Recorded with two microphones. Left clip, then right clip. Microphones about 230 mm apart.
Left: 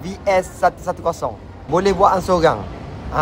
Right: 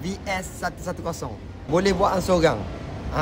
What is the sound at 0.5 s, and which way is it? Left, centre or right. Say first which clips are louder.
Speech: left 11 dB; centre.